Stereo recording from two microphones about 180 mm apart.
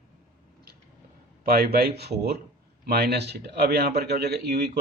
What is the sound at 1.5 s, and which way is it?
A man's voice, 60° right (ahead or behind).